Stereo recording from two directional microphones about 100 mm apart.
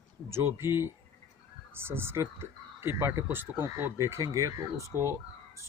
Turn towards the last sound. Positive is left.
turn(degrees=-30)  # may be behind; listen again after turning